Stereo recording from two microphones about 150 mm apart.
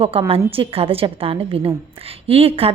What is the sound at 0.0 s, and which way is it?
Speech, 40° right (ahead or behind).